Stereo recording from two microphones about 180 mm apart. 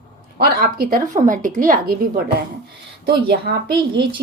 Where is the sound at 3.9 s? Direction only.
25° right (ahead or behind).